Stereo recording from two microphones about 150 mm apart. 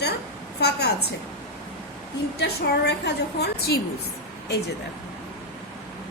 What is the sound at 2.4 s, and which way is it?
A woman's voice, 90° left.